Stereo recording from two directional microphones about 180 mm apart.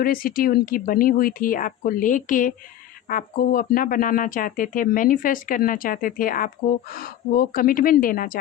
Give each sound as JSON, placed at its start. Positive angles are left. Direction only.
{"t": 0.0, "sound": "speech", "side_deg": 55}